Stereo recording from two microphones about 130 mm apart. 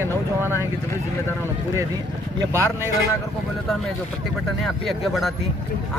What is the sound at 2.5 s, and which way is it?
Speech, 20° right (ahead or behind).